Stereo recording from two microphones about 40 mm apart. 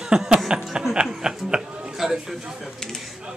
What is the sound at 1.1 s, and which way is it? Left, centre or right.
Speech, centre.